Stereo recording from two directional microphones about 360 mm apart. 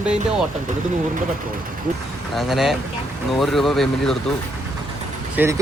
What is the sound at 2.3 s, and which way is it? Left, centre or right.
Speech, centre.